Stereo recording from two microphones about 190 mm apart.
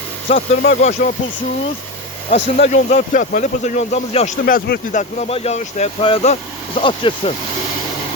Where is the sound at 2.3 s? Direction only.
35° left (ahead or behind).